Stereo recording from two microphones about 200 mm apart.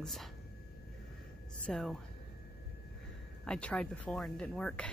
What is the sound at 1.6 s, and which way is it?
Speech, 5° left (ahead or behind).